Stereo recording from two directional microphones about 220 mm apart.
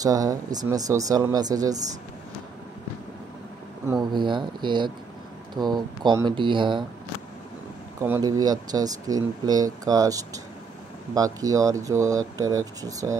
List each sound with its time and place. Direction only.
0.0 s speech: 15° right (ahead or behind)
4.0 s speech: 20° right (ahead or behind)
8.0 s speech: 15° right (ahead or behind)